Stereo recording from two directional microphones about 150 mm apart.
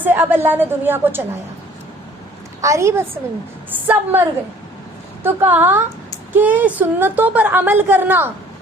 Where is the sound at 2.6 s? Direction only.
20° right (ahead or behind).